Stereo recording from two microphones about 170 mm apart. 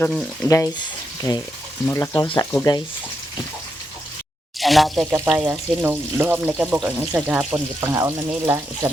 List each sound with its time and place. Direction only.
0.4 s speech: 20° left (ahead or behind)
4.6 s speech: centre (ahead or behind)
5.1 s speech: 10° right (ahead or behind)
7.8 s speech: 15° right (ahead or behind)